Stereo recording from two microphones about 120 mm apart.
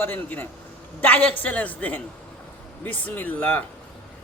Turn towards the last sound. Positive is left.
turn(degrees=15)  # may be behind; listen again after turning